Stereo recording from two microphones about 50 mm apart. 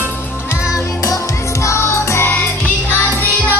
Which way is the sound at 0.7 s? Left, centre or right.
Left.